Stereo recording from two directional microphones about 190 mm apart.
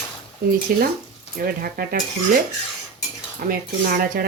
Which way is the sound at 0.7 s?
50° right (ahead or behind).